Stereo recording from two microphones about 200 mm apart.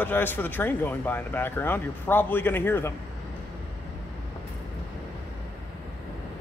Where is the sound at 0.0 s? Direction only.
10° left (ahead or behind).